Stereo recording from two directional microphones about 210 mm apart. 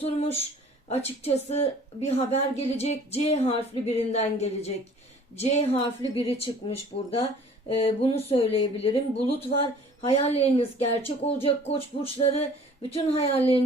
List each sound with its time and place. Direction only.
0.9 s a woman's voice: 30° left (ahead or behind)